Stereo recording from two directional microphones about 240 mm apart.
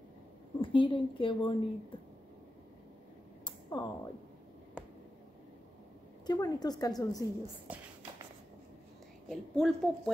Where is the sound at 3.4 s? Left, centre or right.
Centre.